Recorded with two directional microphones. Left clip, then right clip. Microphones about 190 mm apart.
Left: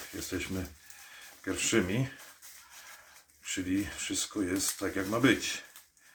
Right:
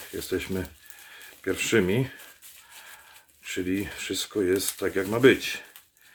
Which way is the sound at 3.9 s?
45° right (ahead or behind).